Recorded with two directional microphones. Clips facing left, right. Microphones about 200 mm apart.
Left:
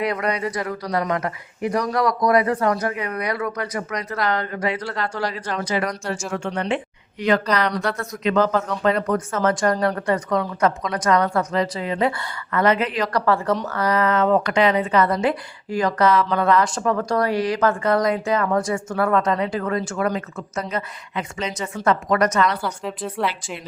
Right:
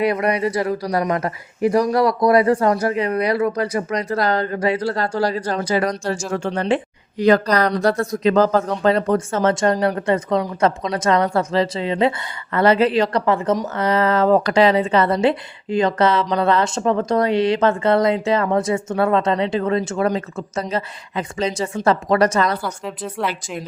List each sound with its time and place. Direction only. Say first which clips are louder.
0.0 s a woman's voice: right 5 dB; 25° right (ahead or behind)
22.8 s speech: even; centre (ahead or behind)